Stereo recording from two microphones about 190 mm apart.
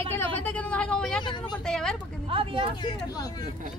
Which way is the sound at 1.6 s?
5° left (ahead or behind).